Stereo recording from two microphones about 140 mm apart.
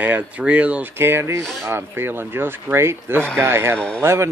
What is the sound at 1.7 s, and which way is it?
Speech, 15° right (ahead or behind).